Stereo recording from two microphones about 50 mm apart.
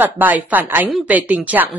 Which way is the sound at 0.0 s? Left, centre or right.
Right.